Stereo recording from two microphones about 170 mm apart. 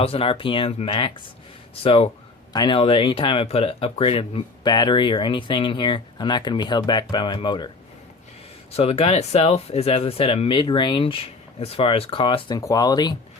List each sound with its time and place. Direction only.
0.0 s speech: 35° left (ahead or behind)
8.7 s speech: 35° left (ahead or behind)